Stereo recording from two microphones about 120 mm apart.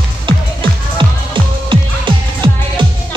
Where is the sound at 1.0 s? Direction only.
40° right (ahead or behind).